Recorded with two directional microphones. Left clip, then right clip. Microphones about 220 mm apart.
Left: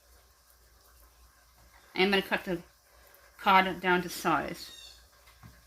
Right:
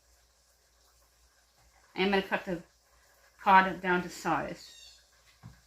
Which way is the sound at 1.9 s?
45° left (ahead or behind).